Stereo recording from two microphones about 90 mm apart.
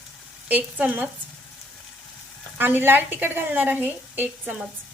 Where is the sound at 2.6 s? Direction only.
20° right (ahead or behind).